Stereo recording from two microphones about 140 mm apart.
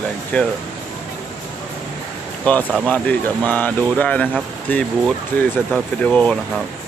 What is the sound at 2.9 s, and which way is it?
Speech, 10° left (ahead or behind).